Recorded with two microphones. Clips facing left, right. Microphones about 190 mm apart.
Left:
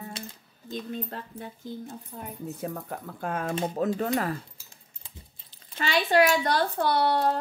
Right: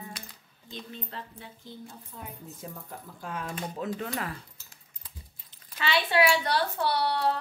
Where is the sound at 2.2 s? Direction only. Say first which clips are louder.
Left 8 dB; 65° left (ahead or behind); by 3.9 s 45° left (ahead or behind).